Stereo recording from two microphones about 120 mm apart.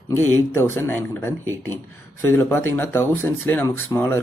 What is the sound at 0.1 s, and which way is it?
Speech, 20° left (ahead or behind).